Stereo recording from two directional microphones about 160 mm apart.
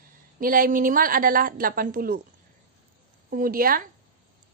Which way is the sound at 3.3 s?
65° right (ahead or behind).